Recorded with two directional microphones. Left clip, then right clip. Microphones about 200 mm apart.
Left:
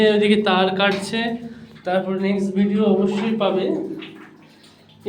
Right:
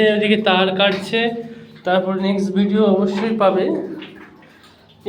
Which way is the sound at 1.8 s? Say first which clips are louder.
Right 3 dB; 15° right (ahead or behind).